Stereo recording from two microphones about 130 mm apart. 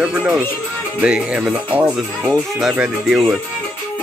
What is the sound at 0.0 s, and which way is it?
Speech, 10° right (ahead or behind).